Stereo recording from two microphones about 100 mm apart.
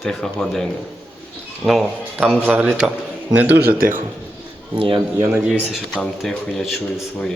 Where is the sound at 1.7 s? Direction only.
Centre (ahead or behind).